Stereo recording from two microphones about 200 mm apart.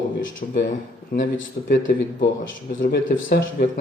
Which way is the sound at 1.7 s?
45° left (ahead or behind).